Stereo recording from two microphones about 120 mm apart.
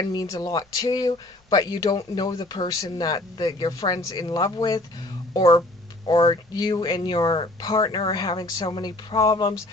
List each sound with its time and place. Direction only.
0.0 s speech: 35° left (ahead or behind)
6.1 s speech: 40° left (ahead or behind)